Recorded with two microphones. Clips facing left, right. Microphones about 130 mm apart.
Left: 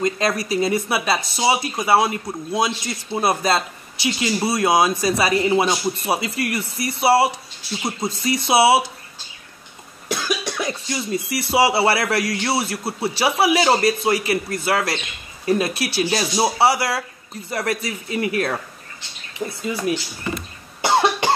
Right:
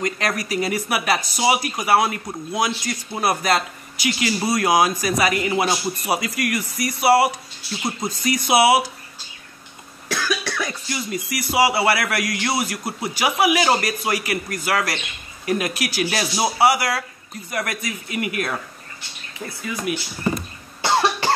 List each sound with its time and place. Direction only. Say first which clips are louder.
0.0 s speech: left 3 dB; 25° left (ahead or behind)
10.0 s cough: left 1 dB; 20° left (ahead or behind)
11.5 s speech: left 1 dB; 25° left (ahead or behind)
19.6 s speech: left 3 dB; 30° left (ahead or behind)
20.8 s cough: left 2 dB; 20° left (ahead or behind)